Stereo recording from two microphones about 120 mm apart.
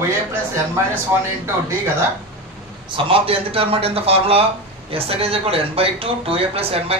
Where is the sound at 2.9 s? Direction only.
50° right (ahead or behind).